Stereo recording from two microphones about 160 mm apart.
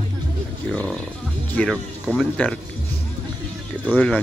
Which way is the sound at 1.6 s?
Centre (ahead or behind).